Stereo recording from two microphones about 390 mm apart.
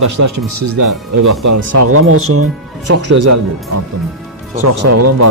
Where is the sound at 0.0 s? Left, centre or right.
Right.